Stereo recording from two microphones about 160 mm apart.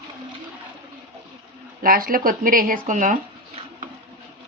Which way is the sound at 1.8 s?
65° right (ahead or behind).